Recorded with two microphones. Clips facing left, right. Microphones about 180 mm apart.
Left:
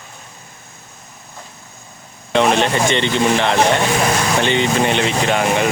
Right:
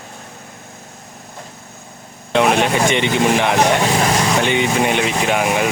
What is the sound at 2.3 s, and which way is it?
Speech, 10° right (ahead or behind).